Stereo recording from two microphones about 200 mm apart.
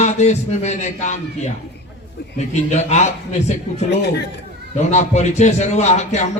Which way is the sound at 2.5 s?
35° left (ahead or behind).